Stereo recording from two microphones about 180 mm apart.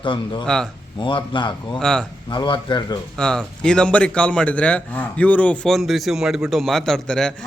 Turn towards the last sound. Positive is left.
turn(degrees=5)  # may be behind; listen again after turning